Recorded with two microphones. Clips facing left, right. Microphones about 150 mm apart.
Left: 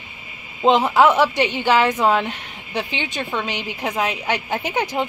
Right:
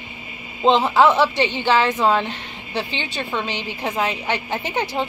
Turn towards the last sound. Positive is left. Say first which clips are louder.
# left 1 dB
turn(degrees=15)  # may be behind; listen again after turning